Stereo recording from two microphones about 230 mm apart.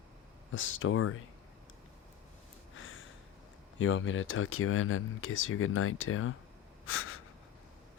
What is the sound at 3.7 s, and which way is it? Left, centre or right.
Speech, left.